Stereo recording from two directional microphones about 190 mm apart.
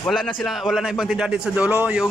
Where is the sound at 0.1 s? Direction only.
Centre (ahead or behind).